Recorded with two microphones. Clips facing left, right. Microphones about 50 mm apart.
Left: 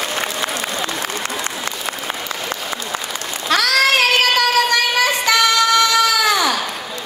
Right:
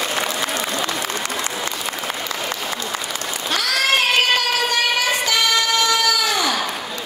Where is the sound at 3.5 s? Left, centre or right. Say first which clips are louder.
Left 5 dB; left.